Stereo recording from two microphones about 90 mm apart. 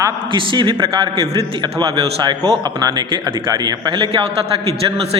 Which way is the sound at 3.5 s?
45° right (ahead or behind).